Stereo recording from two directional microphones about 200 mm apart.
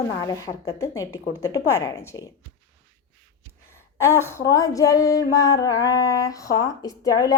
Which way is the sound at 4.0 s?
15° left (ahead or behind).